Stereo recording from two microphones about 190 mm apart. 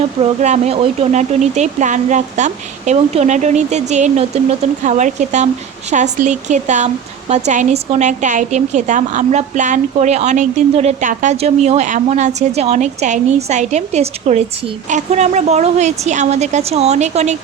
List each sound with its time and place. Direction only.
0.2 s speech: 35° right (ahead or behind)